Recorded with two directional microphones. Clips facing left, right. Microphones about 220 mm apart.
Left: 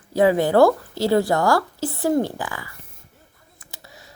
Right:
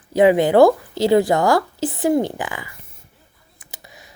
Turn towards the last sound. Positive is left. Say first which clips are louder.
# right 1 dB
turn(degrees=-15)  # may be behind; listen again after turning